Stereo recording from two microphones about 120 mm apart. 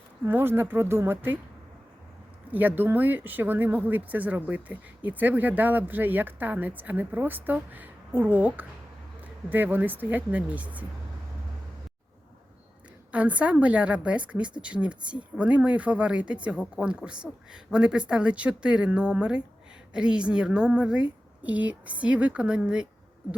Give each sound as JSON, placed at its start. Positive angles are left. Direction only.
{"t": 0.3, "sound": "speech", "side_deg": -20}
{"t": 2.5, "sound": "speech", "side_deg": -15}
{"t": 13.1, "sound": "speech", "side_deg": -10}